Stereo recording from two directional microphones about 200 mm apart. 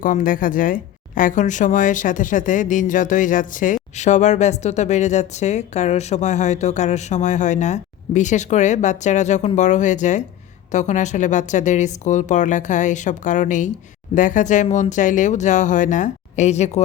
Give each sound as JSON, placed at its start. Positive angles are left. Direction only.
{"t": 0.0, "sound": "speech", "side_deg": 40}